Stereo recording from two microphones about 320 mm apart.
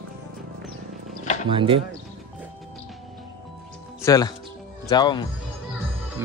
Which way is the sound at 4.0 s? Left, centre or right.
Centre.